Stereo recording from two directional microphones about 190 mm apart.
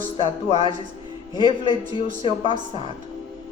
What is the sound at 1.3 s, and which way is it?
Speech, 25° left (ahead or behind).